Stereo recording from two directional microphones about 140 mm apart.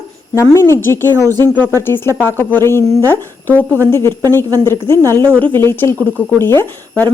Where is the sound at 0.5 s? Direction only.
20° left (ahead or behind).